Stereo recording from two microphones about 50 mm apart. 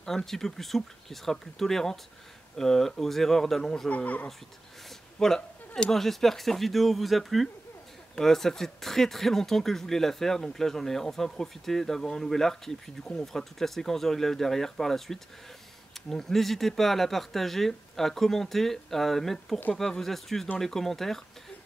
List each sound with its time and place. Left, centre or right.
0.0 s speech: centre
3.9 s speech: left
5.2 s speech: centre